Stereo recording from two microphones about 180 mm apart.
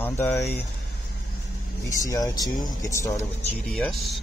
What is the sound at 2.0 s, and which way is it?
Speech, 20° left (ahead or behind).